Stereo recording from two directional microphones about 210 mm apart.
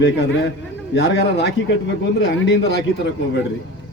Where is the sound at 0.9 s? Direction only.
50° left (ahead or behind).